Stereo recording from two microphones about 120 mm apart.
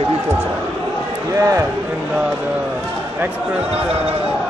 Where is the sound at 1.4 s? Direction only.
30° right (ahead or behind).